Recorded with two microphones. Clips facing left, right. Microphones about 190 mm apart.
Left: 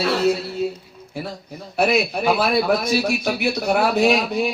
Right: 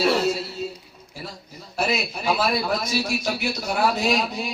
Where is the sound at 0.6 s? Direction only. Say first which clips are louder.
Left 7 dB; 55° left (ahead or behind).